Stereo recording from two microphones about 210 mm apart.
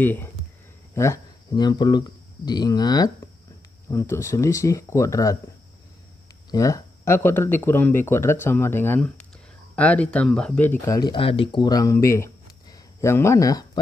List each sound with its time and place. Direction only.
0.0 s speech: 10° left (ahead or behind)
6.5 s speech: 15° left (ahead or behind)